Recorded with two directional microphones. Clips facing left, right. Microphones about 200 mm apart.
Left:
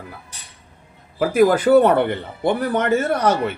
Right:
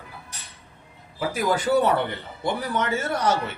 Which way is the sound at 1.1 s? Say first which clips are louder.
Left 9 dB; 55° left (ahead or behind).